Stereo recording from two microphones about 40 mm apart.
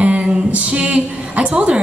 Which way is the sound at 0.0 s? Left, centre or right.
Right.